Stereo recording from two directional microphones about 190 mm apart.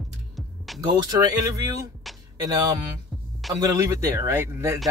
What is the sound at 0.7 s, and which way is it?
Speech, 20° right (ahead or behind).